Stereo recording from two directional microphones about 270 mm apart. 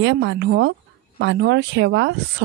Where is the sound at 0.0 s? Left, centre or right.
Right.